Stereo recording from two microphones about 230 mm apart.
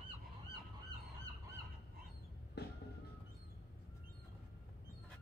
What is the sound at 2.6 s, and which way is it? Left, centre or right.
Music, left.